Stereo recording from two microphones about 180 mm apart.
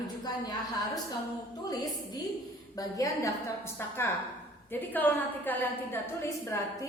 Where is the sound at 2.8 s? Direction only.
20° left (ahead or behind).